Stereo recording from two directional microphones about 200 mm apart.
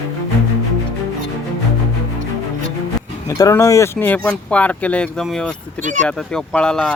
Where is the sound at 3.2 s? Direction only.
15° left (ahead or behind).